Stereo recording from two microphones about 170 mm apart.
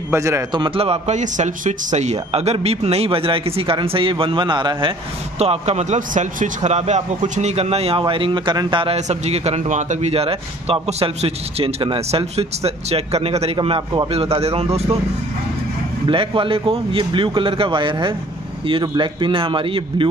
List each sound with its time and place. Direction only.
0.1 s a man's voice: 15° right (ahead or behind)
5.4 s a man's voice: 40° right (ahead or behind)
16.1 s a man's voice: 30° right (ahead or behind)